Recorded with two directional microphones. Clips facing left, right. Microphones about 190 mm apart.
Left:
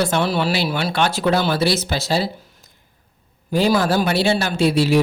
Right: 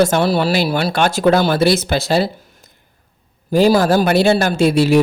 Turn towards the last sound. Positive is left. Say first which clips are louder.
# right 4 dB
turn(degrees=-50)  # may be behind; listen again after turning